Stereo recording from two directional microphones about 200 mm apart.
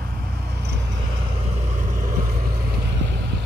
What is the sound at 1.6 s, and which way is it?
Vehicle, 40° right (ahead or behind).